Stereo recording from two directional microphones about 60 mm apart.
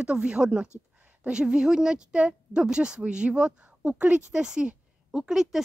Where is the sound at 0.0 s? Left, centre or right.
Centre.